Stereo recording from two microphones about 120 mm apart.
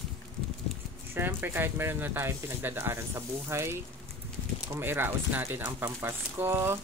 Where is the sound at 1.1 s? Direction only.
20° right (ahead or behind).